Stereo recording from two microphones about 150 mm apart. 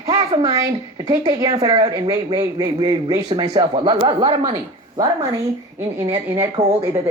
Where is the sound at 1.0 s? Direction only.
30° right (ahead or behind).